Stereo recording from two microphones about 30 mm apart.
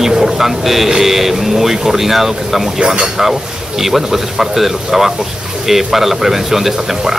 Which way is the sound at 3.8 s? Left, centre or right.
Centre.